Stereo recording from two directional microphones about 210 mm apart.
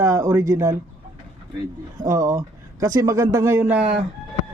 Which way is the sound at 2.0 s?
15° right (ahead or behind).